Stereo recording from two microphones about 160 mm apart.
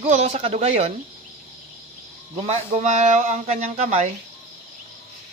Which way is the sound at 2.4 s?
45° right (ahead or behind).